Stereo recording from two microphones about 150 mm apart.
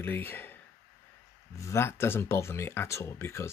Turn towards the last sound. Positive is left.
turn(degrees=15)  # may be behind; listen again after turning